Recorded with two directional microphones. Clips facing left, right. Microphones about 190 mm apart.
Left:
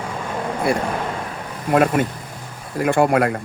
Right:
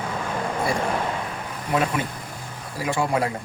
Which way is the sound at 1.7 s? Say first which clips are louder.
Left 7 dB; 55° left (ahead or behind).